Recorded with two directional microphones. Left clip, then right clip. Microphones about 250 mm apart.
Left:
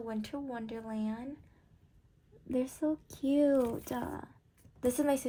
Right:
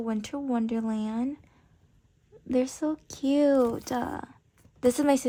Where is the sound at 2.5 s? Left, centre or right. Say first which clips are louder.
Right 6 dB; right.